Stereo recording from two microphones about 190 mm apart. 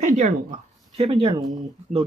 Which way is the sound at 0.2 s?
35° right (ahead or behind).